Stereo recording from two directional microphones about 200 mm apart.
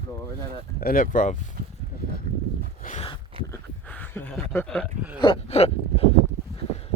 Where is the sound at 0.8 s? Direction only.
45° left (ahead or behind).